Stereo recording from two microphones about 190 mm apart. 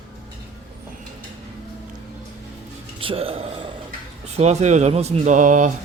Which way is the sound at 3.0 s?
30° right (ahead or behind).